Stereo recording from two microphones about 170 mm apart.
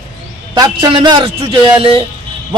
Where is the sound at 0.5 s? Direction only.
25° right (ahead or behind).